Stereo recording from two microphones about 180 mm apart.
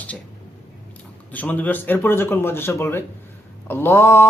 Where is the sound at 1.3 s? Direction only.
10° left (ahead or behind).